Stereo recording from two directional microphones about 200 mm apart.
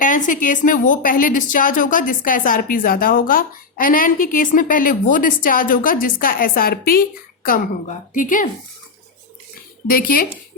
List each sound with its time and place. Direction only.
0.0 s a woman's voice: 40° left (ahead or behind)
9.8 s a woman's voice: 45° left (ahead or behind)